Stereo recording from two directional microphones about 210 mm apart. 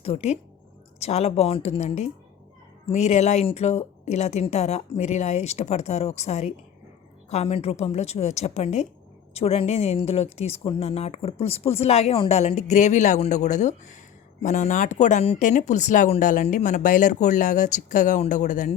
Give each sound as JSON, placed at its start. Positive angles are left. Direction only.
{"t": 0.0, "sound": "a woman's voice", "side_deg": 30}